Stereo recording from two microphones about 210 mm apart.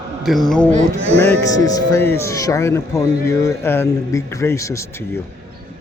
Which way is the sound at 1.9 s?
10° left (ahead or behind).